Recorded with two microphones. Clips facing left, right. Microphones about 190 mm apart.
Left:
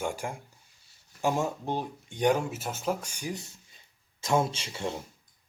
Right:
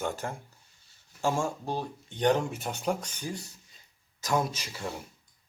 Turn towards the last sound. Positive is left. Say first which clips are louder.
# left 3 dB
turn(degrees=25)  # may be behind; listen again after turning